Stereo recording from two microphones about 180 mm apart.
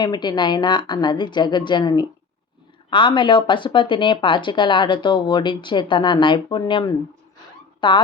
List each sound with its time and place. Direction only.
0.0 s speech: 25° left (ahead or behind)